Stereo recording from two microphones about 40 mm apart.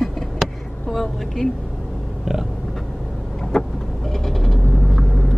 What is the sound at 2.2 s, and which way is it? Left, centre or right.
Pig, centre.